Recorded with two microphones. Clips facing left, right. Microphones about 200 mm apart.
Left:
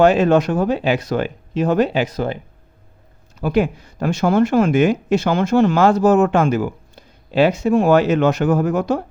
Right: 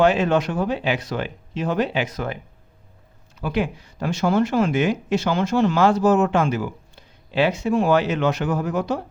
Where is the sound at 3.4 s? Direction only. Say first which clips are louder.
Left 6 dB; 45° left (ahead or behind).